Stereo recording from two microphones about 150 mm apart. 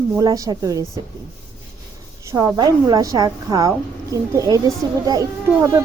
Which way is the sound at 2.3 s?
25° right (ahead or behind).